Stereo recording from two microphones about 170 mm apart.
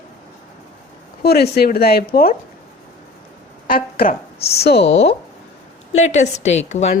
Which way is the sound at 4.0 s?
60° left (ahead or behind).